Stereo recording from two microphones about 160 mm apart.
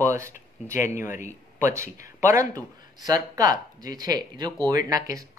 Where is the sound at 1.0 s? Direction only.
15° right (ahead or behind).